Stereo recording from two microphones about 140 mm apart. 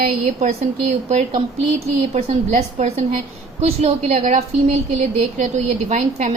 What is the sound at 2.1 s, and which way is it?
A woman's voice, 55° right (ahead or behind).